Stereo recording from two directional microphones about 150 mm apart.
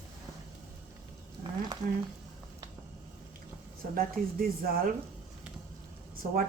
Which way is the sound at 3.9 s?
80° right.